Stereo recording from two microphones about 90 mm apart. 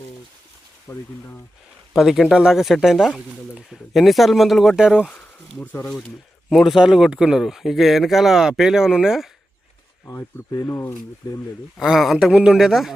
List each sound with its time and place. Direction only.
0.9 s speech: 35° left (ahead or behind)
1.9 s speech: 5° right (ahead or behind)
6.5 s speech: centre (ahead or behind)
10.1 s speech: 35° left (ahead or behind)
11.8 s speech: 5° right (ahead or behind)